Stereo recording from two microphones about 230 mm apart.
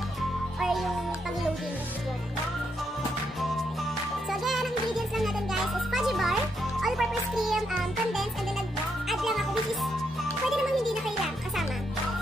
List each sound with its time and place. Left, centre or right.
0.6 s music: centre
4.3 s music: centre
6.8 s a child's voice: centre
9.1 s music: centre
10.5 s speech: centre